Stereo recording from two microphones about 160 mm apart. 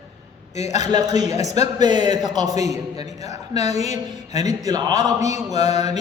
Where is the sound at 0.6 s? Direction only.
45° left (ahead or behind).